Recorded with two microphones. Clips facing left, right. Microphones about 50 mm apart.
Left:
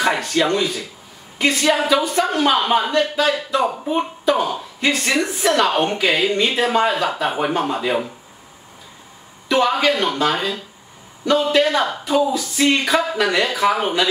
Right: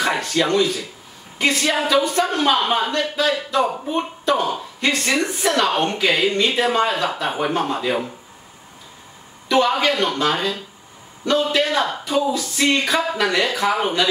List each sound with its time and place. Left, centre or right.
0.0 s a woman's voice: centre
9.5 s a woman's voice: centre